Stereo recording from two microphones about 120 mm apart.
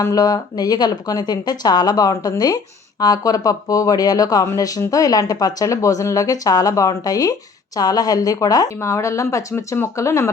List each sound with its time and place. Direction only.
0.0 s speech: 30° left (ahead or behind)